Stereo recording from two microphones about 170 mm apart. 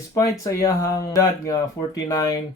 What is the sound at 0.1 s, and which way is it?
Speech, 20° left (ahead or behind).